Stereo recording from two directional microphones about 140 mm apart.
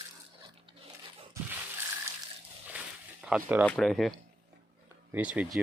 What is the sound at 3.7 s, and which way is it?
Speech, 5° left (ahead or behind).